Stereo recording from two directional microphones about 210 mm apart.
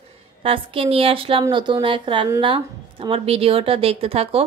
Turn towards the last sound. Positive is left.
turn(degrees=-25)  # may be behind; listen again after turning